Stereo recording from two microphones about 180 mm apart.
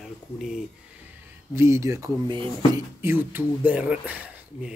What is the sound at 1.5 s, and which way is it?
Speech, 15° right (ahead or behind).